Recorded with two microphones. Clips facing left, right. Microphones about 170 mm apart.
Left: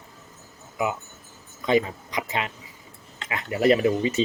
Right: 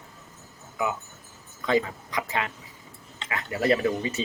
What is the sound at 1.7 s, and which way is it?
Speech, 20° left (ahead or behind).